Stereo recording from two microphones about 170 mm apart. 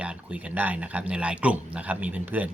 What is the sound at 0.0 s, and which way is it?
Speech, 5° right (ahead or behind).